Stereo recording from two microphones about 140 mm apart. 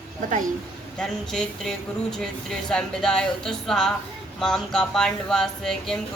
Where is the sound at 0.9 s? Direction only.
5° left (ahead or behind).